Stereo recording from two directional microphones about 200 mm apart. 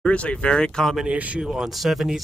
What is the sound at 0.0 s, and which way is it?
Speech, 5° left (ahead or behind).